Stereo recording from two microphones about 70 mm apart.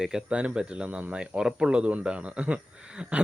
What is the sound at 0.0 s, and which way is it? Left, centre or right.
Speech, centre.